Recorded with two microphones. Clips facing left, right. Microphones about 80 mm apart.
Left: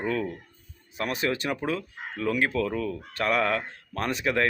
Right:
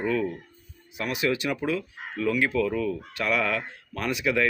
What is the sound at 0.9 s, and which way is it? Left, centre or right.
A man's voice, left.